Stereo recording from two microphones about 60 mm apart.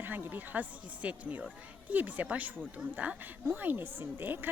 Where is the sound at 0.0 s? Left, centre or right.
Right.